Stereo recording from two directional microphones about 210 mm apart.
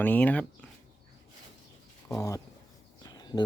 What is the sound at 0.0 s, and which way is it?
Speech, 10° left (ahead or behind).